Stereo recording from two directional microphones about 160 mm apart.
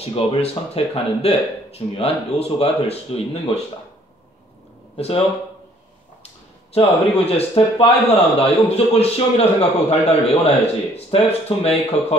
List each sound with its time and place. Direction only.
0.0 s speech: 40° left (ahead or behind)
4.9 s speech: 40° left (ahead or behind)
6.7 s speech: 40° left (ahead or behind)